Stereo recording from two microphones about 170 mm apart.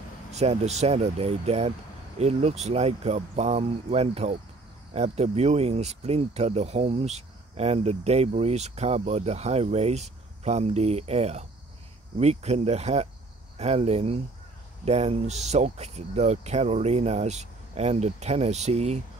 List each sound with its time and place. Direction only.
0.3 s speech: 40° right (ahead or behind)